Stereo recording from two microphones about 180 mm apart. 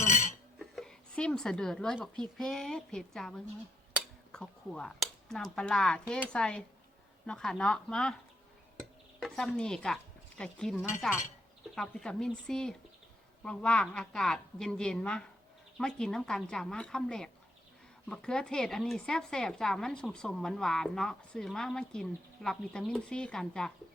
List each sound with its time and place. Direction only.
0.0 s a sound: 45° left (ahead or behind)
0.6 s speech: centre (ahead or behind)
9.2 s a woman's voice: centre (ahead or behind)